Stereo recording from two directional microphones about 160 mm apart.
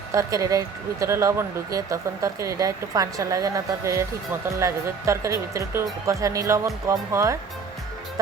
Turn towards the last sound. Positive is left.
turn(degrees=-20)  # may be behind; listen again after turning